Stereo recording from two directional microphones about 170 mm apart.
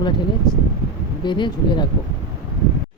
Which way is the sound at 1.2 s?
25° left (ahead or behind).